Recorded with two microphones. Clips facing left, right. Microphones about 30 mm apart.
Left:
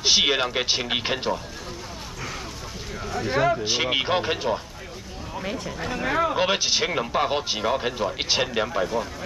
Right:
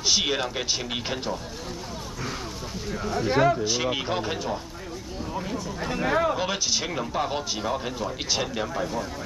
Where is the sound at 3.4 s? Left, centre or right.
Left.